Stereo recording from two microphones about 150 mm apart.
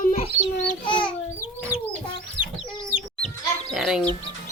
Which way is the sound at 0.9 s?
35° left (ahead or behind).